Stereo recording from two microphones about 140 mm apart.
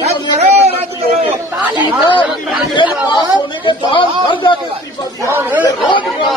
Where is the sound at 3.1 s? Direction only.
35° left (ahead or behind).